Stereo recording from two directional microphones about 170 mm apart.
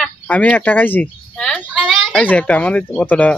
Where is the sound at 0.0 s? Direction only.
10° left (ahead or behind).